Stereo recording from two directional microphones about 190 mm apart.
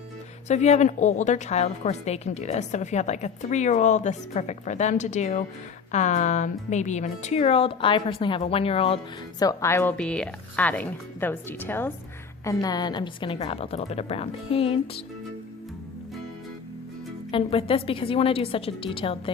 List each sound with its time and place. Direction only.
0.4 s a woman's voice: 35° left (ahead or behind)
9.4 s a woman's voice: 15° left (ahead or behind)
17.3 s a woman's voice: 30° left (ahead or behind)